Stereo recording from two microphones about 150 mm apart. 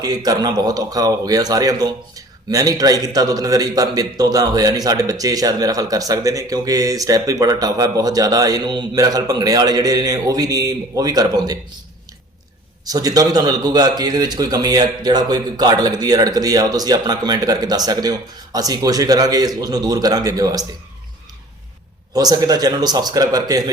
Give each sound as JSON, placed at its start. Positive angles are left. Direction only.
{"t": 0.0, "sound": "a man's voice", "side_deg": -25}
{"t": 12.8, "sound": "a man's voice", "side_deg": -25}
{"t": 22.1, "sound": "a man's voice", "side_deg": -25}